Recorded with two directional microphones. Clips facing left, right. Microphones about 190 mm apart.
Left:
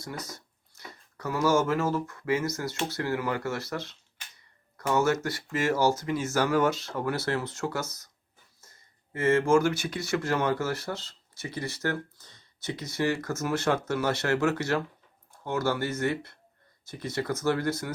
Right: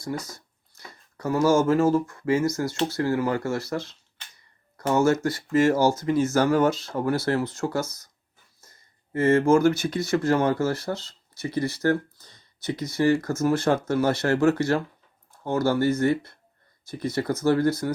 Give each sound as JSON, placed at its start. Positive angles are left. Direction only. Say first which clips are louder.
{"t": 0.0, "sound": "speech", "louder": "right 7 dB", "side_deg": -30}
{"t": 1.1, "sound": "a sound", "louder": "right 6 dB", "side_deg": -45}
{"t": 1.7, "sound": "speech", "louder": "right 7 dB", "side_deg": -45}
{"t": 2.0, "sound": "speech", "louder": "right 5 dB", "side_deg": -30}
{"t": 2.4, "sound": "speech", "louder": "right 6 dB", "side_deg": -45}
{"t": 4.8, "sound": "speech", "louder": "right 4 dB", "side_deg": -30}
{"t": 5.2, "sound": "speech", "louder": "right 8 dB", "side_deg": -45}
{"t": 9.1, "sound": "speech", "louder": "right 4 dB", "side_deg": -35}
{"t": 10.3, "sound": "speech", "louder": "right 5 dB", "side_deg": -35}